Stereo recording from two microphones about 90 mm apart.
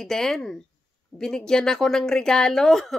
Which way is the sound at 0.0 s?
5° left (ahead or behind).